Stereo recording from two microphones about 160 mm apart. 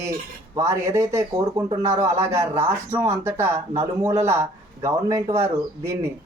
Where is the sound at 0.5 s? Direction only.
20° right (ahead or behind).